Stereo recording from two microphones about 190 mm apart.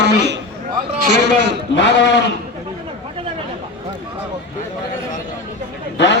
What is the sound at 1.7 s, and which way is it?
Speech, 70° left (ahead or behind).